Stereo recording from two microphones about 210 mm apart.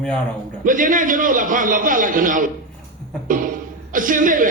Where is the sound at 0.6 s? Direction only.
40° right (ahead or behind).